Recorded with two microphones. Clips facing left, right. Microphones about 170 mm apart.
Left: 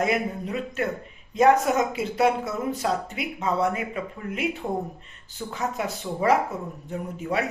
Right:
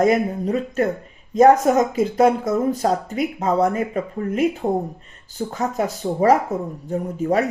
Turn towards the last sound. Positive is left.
turn(degrees=-40)  # may be behind; listen again after turning